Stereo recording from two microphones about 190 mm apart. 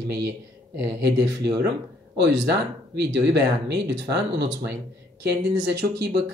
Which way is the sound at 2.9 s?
65° right (ahead or behind).